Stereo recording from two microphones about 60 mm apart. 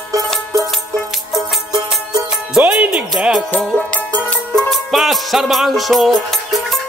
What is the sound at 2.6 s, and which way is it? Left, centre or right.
Music, right.